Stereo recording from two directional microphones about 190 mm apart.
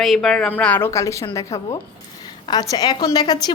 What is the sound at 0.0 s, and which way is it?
A woman's voice, centre (ahead or behind).